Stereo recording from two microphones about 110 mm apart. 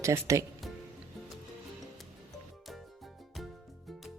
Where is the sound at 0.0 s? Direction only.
30° right (ahead or behind).